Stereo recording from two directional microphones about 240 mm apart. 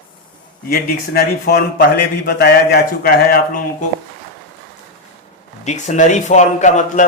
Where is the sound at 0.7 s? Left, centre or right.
Left.